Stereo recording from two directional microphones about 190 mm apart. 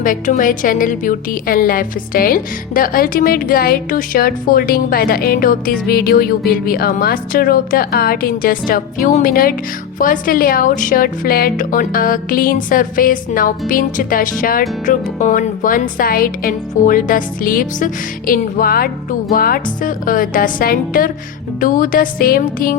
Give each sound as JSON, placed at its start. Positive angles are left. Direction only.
{"t": 0.0, "sound": "a woman's voice", "side_deg": 45}